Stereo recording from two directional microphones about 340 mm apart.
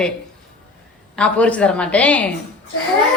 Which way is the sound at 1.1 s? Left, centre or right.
Centre.